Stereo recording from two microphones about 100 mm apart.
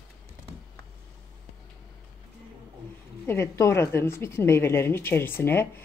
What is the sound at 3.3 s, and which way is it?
A woman's voice, 30° left (ahead or behind).